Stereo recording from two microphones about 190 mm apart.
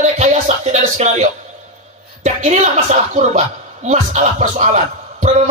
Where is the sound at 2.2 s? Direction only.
40° right (ahead or behind).